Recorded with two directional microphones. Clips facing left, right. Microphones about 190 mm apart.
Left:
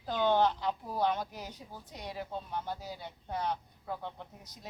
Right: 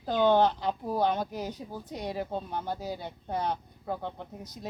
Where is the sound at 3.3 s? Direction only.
35° right (ahead or behind).